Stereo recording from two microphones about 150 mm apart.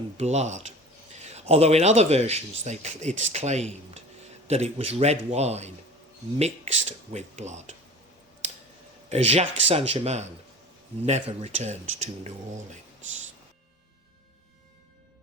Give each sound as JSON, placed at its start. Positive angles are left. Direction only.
{"t": 0.2, "sound": "speech", "side_deg": -50}
{"t": 9.0, "sound": "speech", "side_deg": -45}